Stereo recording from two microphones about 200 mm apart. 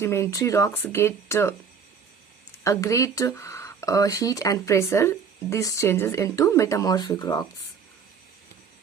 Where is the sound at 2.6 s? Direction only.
15° left (ahead or behind).